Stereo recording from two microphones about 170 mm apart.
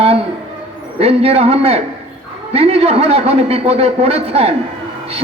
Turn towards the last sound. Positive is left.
turn(degrees=-35)  # may be behind; listen again after turning